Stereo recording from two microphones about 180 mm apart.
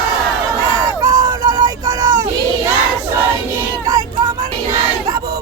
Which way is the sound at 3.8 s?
20° right (ahead or behind).